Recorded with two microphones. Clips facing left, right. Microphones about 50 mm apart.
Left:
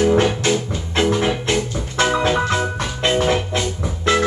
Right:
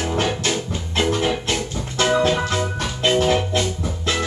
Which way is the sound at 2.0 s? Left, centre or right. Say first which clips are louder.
Even; centre.